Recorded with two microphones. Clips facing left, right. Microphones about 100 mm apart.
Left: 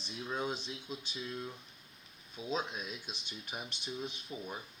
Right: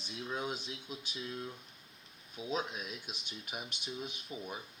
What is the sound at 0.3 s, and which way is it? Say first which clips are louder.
Speech: left 2 dB; 10° right (ahead or behind).